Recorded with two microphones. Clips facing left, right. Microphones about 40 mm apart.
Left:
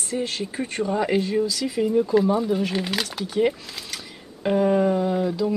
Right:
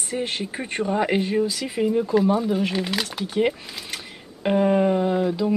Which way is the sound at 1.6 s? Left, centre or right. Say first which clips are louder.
Left 1 dB; centre.